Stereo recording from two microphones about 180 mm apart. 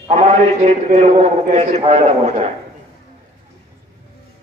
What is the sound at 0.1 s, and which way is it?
A man's voice, 40° right (ahead or behind).